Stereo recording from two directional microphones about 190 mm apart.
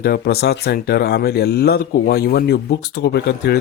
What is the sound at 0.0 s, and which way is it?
Speech, 55° left (ahead or behind).